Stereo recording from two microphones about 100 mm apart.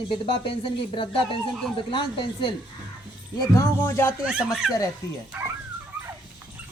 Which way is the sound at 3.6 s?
25° left (ahead or behind).